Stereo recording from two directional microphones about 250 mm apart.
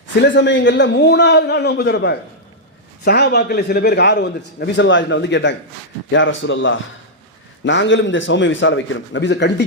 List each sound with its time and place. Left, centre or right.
0.2 s a man's voice: left